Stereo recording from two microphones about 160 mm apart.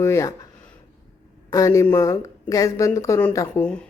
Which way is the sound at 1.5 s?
20° left (ahead or behind).